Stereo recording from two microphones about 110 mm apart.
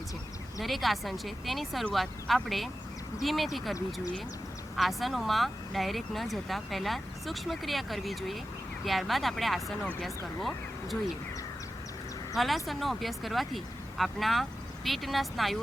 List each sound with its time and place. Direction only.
0.6 s speech: centre (ahead or behind)
4.8 s speech: centre (ahead or behind)
12.4 s speech: centre (ahead or behind)